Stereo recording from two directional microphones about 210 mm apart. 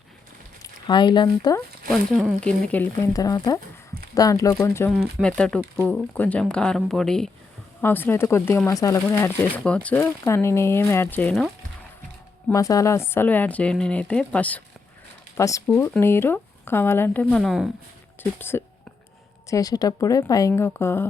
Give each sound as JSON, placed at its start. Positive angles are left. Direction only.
{"t": 0.6, "sound": "speech", "side_deg": 20}
{"t": 1.9, "sound": "speech", "side_deg": 0}
{"t": 12.5, "sound": "speech", "side_deg": 15}
{"t": 18.2, "sound": "speech", "side_deg": 10}